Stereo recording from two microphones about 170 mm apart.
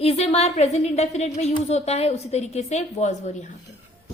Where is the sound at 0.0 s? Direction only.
35° left (ahead or behind).